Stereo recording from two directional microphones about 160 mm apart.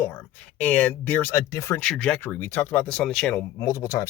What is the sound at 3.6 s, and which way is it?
Speech, 20° left (ahead or behind).